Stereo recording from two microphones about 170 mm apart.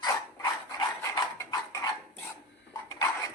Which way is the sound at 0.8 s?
20° left (ahead or behind).